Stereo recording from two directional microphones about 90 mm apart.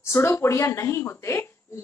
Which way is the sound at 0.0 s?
30° left (ahead or behind).